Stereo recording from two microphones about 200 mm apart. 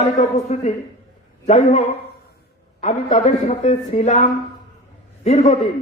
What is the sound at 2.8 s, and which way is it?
A man's voice, 35° left (ahead or behind).